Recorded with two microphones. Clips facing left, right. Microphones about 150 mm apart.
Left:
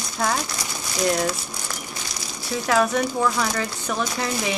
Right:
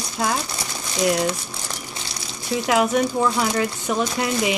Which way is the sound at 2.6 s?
20° right (ahead or behind).